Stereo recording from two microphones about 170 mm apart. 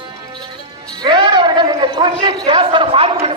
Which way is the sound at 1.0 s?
25° right (ahead or behind).